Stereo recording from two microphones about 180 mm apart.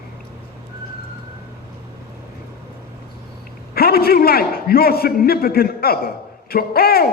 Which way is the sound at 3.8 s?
55° left (ahead or behind).